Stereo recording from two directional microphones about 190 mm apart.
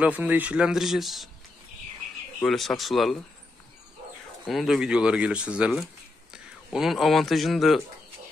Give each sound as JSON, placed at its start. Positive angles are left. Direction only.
{"t": 0.0, "sound": "speech", "side_deg": -10}
{"t": 2.4, "sound": "speech", "side_deg": 0}
{"t": 4.5, "sound": "a man's voice", "side_deg": 0}